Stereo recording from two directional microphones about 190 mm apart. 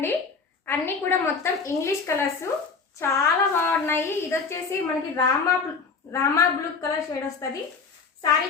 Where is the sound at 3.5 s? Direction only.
10° left (ahead or behind).